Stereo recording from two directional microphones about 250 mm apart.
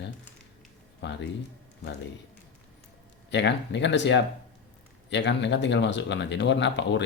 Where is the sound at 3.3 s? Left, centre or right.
Left.